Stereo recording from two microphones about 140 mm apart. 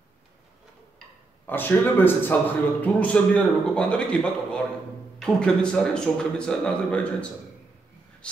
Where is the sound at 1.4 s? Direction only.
15° left (ahead or behind).